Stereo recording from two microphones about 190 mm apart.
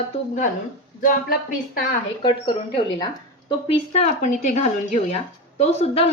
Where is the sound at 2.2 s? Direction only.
25° left (ahead or behind).